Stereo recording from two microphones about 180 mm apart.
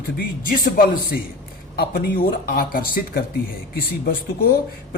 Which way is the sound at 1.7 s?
60° left (ahead or behind).